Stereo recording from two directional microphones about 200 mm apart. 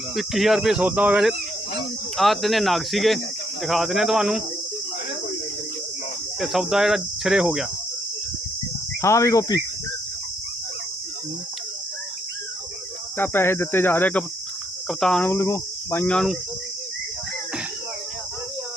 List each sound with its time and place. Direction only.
0.2 s cricket: centre (ahead or behind)
6.4 s cricket: centre (ahead or behind)
9.0 s speech: 15° left (ahead or behind)
13.1 s speech: 10° left (ahead or behind)